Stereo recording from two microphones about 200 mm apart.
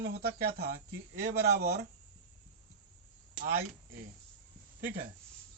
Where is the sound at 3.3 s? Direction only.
45° right (ahead or behind).